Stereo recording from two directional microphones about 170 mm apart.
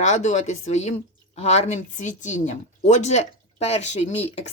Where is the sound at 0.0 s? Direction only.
45° left (ahead or behind).